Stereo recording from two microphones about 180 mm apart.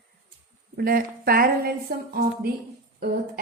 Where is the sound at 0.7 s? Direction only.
55° right (ahead or behind).